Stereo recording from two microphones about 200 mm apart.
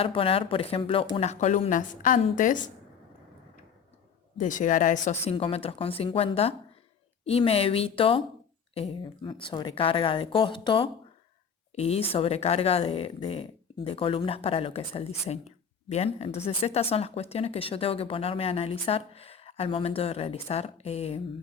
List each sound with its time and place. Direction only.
0.0 s speech: 30° left (ahead or behind)
4.4 s a woman's voice: 40° left (ahead or behind)